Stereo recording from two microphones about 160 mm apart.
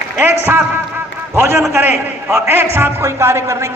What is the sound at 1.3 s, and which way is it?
Speech, 15° right (ahead or behind).